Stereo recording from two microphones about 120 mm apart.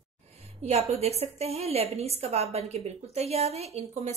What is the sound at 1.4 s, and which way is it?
A woman's voice, 60° right (ahead or behind).